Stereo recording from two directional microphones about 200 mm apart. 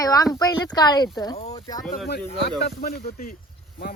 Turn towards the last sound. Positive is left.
turn(degrees=50)  # may be behind; listen again after turning